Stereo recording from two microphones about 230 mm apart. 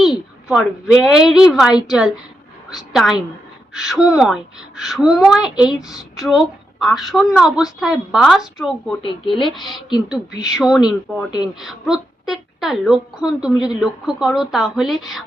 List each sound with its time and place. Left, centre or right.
0.0 s a woman's voice: centre
9.0 s speech: left
9.6 s speech: centre